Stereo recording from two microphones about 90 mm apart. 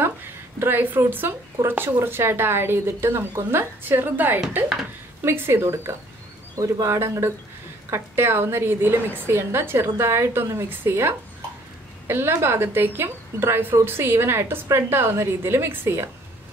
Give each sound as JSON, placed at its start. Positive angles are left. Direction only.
{"t": 0.6, "sound": "a woman's voice", "side_deg": -25}